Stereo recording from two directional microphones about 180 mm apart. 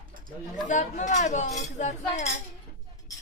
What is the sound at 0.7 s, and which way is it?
Speech, 45° left (ahead or behind).